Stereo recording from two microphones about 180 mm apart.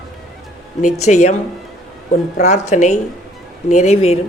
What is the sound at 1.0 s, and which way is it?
Speech, 40° left (ahead or behind).